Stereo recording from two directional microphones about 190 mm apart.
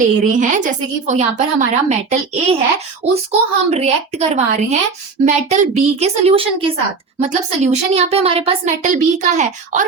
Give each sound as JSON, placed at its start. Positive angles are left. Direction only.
{"t": 0.0, "sound": "a woman's voice", "side_deg": -40}